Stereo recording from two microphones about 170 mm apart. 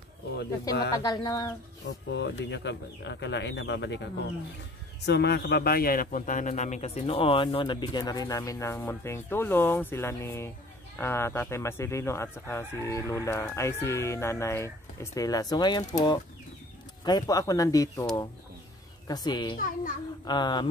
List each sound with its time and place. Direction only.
1.0 s a man's voice: 20° left (ahead or behind)
1.9 s speech: 90° left
5.0 s a man's voice: 80° left; by 15.8 s 25° left (ahead or behind)
17.0 s a man's voice: 20° left (ahead or behind)
19.0 s a man's voice: 25° left (ahead or behind)
19.6 s a child's voice: 55° left (ahead or behind)
20.2 s a man's voice: 25° left (ahead or behind)